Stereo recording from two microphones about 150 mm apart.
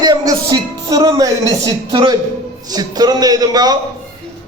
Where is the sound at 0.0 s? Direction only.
25° right (ahead or behind).